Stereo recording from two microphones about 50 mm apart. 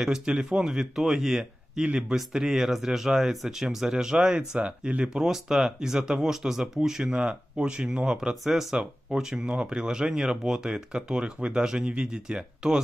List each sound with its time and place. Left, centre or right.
0.0 s speech: centre
5.1 s speech: centre